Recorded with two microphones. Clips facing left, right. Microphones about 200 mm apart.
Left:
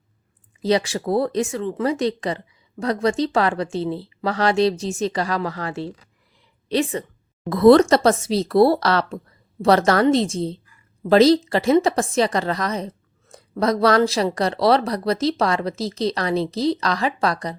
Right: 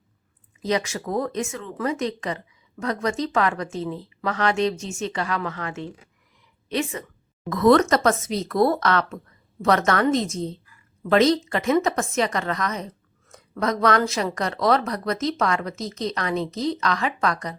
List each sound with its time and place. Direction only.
0.6 s a woman's voice: 30° left (ahead or behind)